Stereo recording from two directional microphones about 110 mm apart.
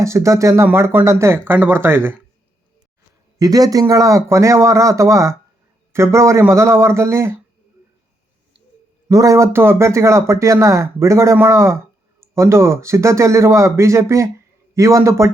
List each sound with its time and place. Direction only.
0.0 s speech: 25° right (ahead or behind)
3.3 s speech: 35° right (ahead or behind)
9.0 s speech: 30° right (ahead or behind)